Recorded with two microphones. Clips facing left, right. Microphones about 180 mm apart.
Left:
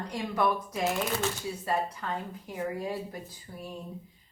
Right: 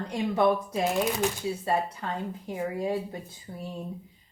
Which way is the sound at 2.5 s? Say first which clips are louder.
Right 4 dB; 25° right (ahead or behind).